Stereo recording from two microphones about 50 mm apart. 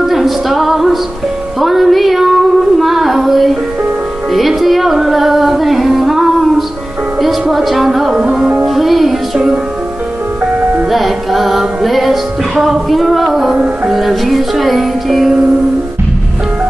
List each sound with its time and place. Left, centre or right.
0.1 s music: centre
1.6 s child singing: centre
4.3 s music: centre
8.2 s music: centre
8.6 s music: centre
10.9 s music: centre